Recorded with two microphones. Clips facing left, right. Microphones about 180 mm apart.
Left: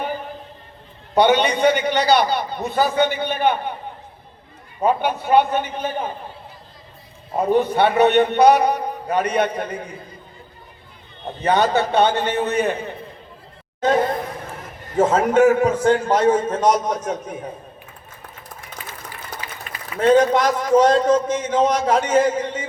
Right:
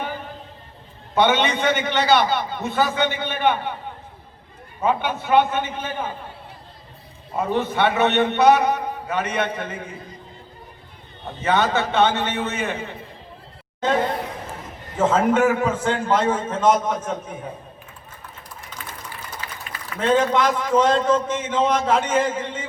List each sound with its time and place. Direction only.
1.1 s a man's voice: 40° left (ahead or behind)
4.8 s a man's voice: 40° left (ahead or behind)
7.3 s a man's voice: 40° left (ahead or behind)
11.3 s a man's voice: 40° left (ahead or behind)
14.9 s a man's voice: 40° left (ahead or behind)
19.6 s a man's voice: 40° left (ahead or behind)